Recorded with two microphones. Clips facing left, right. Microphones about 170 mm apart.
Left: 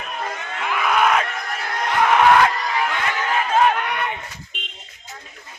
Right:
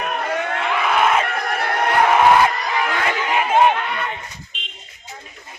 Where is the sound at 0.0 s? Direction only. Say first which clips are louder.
Right 7 dB; 70° right (ahead or behind).